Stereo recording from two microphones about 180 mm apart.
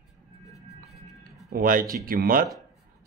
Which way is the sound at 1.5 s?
50° right (ahead or behind).